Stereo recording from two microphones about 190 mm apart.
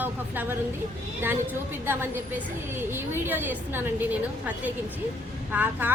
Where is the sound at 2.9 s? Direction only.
10° right (ahead or behind).